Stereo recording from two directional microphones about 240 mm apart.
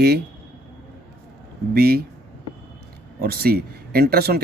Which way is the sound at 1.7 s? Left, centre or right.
Right.